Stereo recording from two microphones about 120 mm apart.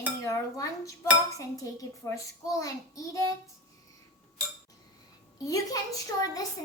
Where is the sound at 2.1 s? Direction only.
25° left (ahead or behind).